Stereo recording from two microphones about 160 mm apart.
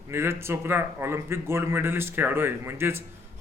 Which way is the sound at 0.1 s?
15° right (ahead or behind).